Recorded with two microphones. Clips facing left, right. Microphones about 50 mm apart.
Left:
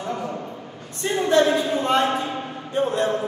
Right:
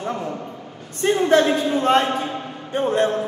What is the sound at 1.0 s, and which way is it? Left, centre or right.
A woman's voice, right.